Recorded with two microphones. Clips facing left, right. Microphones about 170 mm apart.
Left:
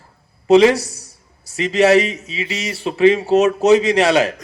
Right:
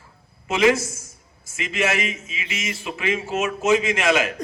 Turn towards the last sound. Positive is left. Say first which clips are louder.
# left 6 dB
turn(degrees=35)  # may be behind; listen again after turning